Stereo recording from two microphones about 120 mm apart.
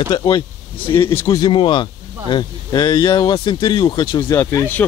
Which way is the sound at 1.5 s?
45° left (ahead or behind).